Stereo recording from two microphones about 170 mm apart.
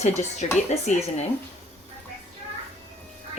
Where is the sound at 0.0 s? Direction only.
40° left (ahead or behind).